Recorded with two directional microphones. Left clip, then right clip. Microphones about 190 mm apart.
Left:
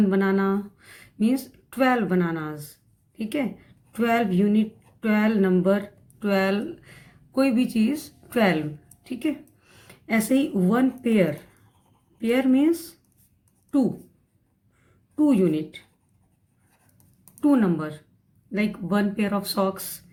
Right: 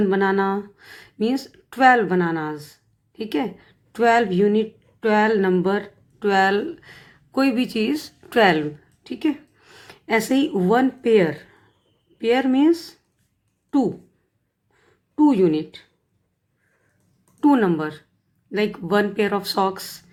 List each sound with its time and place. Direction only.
0.0 s a woman's voice: 25° right (ahead or behind)
15.1 s speech: 25° right (ahead or behind)
17.4 s speech: 25° right (ahead or behind)